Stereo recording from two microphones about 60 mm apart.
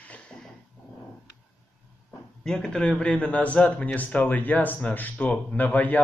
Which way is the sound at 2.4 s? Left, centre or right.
Centre.